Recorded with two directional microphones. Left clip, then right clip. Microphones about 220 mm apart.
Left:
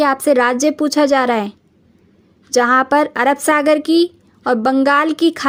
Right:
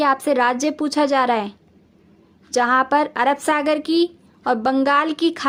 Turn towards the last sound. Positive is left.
turn(degrees=40)  # may be behind; listen again after turning